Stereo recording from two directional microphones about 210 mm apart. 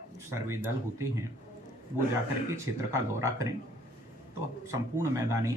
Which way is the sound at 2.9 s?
15° right (ahead or behind).